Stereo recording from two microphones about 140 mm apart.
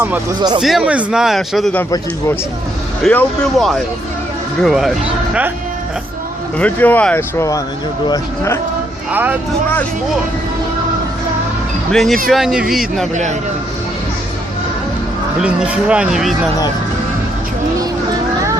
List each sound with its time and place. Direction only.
0.3 s speech: 30° right (ahead or behind)
0.6 s a man's voice: 5° right (ahead or behind)
3.1 s a man's voice: centre (ahead or behind)
4.6 s a man's voice: centre (ahead or behind)
6.6 s speech: 10° left (ahead or behind); by 8.5 s 25° left (ahead or behind)
9.1 s speech: 10° right (ahead or behind)
11.9 s a man's voice: centre (ahead or behind)
15.4 s speech: 10° right (ahead or behind)